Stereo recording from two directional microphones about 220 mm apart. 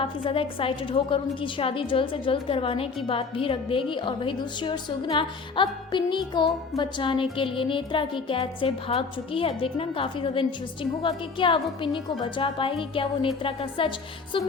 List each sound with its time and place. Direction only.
0.0 s a woman's voice: 25° left (ahead or behind)